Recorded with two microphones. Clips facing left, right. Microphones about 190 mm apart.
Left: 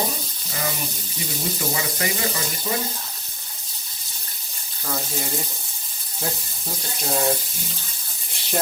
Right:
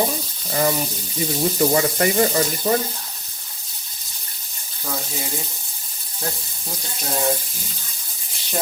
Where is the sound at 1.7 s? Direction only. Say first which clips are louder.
Right 9 dB; 50° right (ahead or behind).